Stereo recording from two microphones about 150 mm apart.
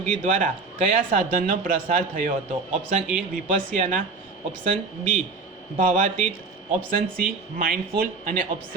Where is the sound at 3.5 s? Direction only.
55° right (ahead or behind).